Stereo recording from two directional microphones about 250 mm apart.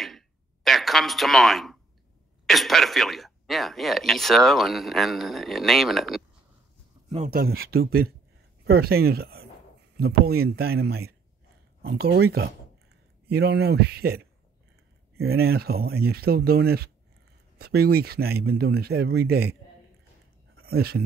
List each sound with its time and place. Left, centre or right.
0.7 s speech: centre
7.3 s speech: right
20.6 s speech: right